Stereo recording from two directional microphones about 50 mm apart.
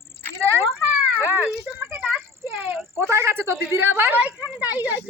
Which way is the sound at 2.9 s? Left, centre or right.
Right.